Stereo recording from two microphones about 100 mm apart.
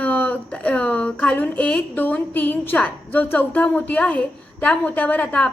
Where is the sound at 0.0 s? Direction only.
20° left (ahead or behind).